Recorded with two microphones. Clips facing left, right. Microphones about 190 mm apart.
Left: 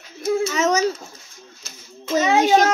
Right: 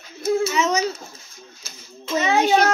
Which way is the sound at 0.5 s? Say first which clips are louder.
Left 2 dB; 45° left (ahead or behind).